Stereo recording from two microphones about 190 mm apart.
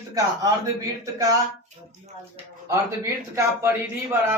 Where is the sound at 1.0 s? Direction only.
15° right (ahead or behind).